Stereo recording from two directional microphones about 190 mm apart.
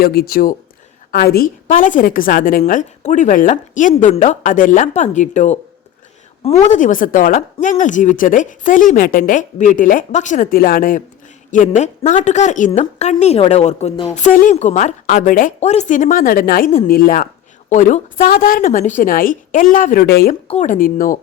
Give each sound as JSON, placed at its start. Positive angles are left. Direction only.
{"t": 0.0, "sound": "a woman's voice", "side_deg": 55}
{"t": 20.5, "sound": "speech", "side_deg": 40}